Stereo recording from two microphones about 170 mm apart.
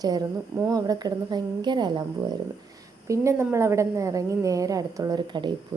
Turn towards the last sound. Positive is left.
turn(degrees=-25)  # may be behind; listen again after turning